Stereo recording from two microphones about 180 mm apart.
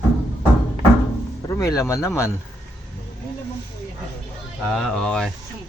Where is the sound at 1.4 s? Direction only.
20° left (ahead or behind).